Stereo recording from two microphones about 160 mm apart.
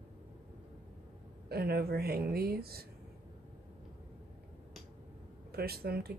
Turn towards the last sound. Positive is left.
turn(degrees=-75)  # may be behind; listen again after turning